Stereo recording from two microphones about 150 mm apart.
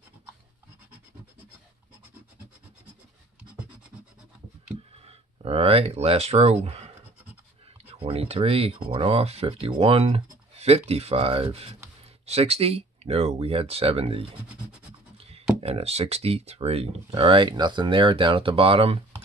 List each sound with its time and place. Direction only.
5.0 s speech: 40° right (ahead or behind)
7.9 s speech: 40° right (ahead or behind)
15.6 s speech: 45° right (ahead or behind)